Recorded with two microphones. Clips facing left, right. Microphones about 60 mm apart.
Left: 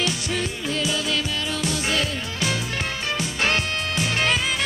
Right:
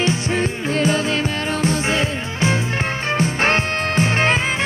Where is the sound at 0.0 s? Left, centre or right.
Right.